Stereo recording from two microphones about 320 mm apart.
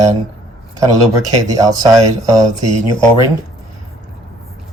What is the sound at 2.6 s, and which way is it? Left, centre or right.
Speech, right.